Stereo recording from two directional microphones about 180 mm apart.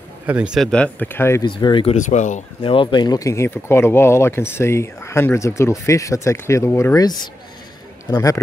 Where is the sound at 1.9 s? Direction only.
40° left (ahead or behind).